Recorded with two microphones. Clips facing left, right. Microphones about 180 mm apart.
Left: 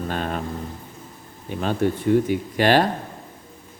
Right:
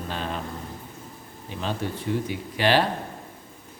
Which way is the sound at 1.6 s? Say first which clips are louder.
Left 7 dB; 50° left (ahead or behind).